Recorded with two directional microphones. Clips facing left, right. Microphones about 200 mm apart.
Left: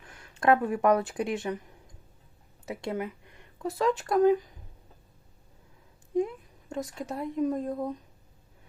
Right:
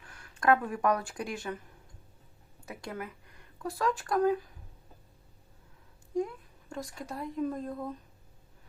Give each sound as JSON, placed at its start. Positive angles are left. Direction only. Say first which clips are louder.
{"t": 0.1, "sound": "speech", "louder": "left 3 dB", "side_deg": 25}
{"t": 2.6, "sound": "speech", "louder": "left 7 dB", "side_deg": 25}
{"t": 6.7, "sound": "speech", "louder": "left 5 dB", "side_deg": 20}